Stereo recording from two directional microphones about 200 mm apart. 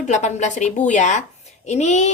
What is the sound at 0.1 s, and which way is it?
Speech, 35° left (ahead or behind).